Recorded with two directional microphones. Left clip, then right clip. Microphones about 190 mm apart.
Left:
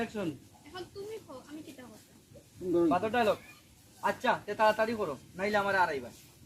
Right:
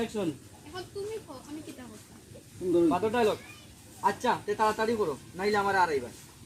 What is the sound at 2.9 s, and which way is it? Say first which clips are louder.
Speech: right 2 dB; 5° left (ahead or behind).